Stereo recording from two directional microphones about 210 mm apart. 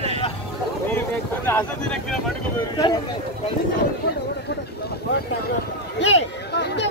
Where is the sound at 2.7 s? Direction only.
20° left (ahead or behind).